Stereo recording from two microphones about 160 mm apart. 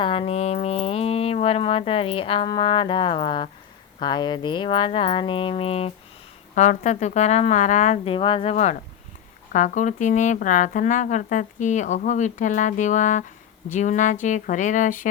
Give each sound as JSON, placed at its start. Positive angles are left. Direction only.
{"t": 0.0, "sound": "speech", "side_deg": 35}
{"t": 6.5, "sound": "speech", "side_deg": 50}